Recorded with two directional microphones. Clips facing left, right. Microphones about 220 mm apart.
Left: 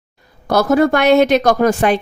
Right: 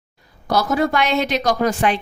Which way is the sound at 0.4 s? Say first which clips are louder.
Left 6 dB; 55° left (ahead or behind).